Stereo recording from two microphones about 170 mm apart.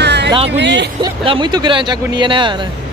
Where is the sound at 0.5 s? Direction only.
90° right.